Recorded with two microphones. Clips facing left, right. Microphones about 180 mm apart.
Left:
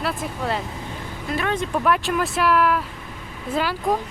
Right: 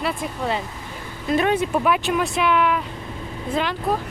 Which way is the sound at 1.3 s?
20° right (ahead or behind).